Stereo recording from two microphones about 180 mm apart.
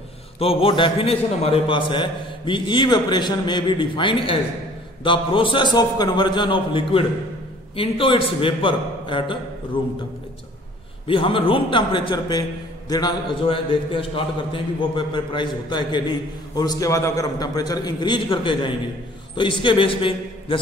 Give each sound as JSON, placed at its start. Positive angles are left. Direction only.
{"t": 0.4, "sound": "a man's voice", "side_deg": 30}
{"t": 11.1, "sound": "a man's voice", "side_deg": 30}